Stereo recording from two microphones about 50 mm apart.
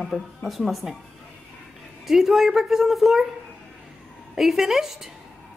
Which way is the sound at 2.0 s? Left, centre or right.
Centre.